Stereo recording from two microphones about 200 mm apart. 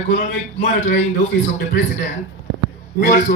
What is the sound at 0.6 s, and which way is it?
Speech, 40° left (ahead or behind).